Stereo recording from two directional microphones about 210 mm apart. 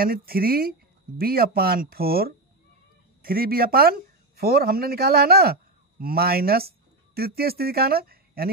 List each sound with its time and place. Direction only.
0.0 s speech: 45° right (ahead or behind)